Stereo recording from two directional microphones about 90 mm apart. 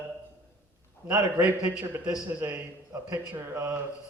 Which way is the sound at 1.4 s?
15° right (ahead or behind).